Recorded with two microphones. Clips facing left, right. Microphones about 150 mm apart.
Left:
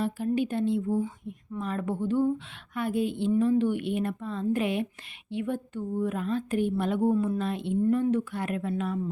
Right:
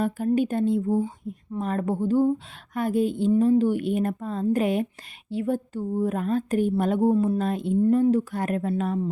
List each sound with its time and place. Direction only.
0.3 s a woman's voice: 45° right (ahead or behind)